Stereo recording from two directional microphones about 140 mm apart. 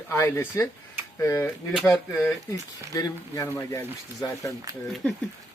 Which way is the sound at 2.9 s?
25° left (ahead or behind).